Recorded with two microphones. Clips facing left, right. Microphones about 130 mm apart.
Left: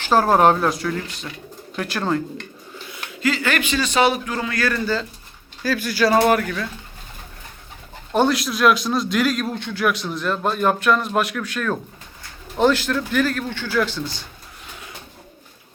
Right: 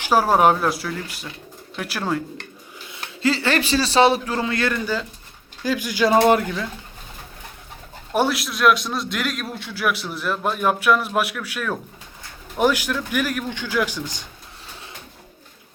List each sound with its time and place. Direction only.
0.0 s a man's voice: 10° right (ahead or behind)
2.9 s a man's voice: 30° right (ahead or behind)
8.1 s a man's voice: 5° right (ahead or behind)